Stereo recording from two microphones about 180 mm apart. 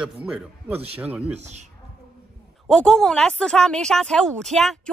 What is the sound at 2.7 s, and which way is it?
Speech, centre (ahead or behind).